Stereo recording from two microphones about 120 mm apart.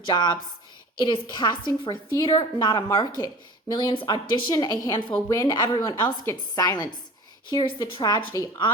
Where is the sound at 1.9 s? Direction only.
25° left (ahead or behind).